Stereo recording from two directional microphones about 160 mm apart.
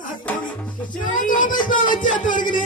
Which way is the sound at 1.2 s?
55° left (ahead or behind).